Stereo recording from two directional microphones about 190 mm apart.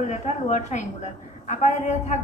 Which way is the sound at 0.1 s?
40° left (ahead or behind).